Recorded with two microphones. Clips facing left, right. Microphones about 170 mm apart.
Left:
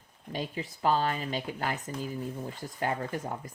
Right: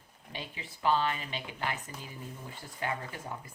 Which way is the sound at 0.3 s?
40° left (ahead or behind).